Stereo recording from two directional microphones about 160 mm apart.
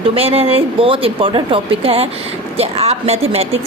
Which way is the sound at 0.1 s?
35° right (ahead or behind).